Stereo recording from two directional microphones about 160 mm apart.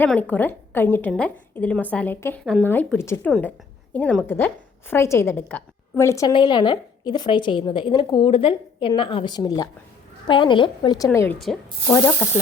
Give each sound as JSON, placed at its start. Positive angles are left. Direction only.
{"t": 0.0, "sound": "a woman's voice", "side_deg": 10}
{"t": 2.4, "sound": "speech", "side_deg": 0}
{"t": 2.6, "sound": "a woman's voice", "side_deg": 10}